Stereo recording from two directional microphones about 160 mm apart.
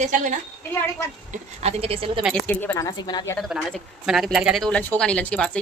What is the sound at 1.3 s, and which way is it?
Speech, 40° right (ahead or behind).